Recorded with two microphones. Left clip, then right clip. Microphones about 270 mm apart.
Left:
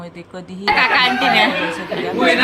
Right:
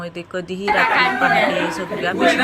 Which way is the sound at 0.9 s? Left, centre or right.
Left.